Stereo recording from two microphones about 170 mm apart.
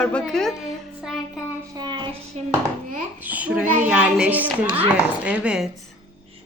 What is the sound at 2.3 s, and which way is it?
Speech, 40° right (ahead or behind).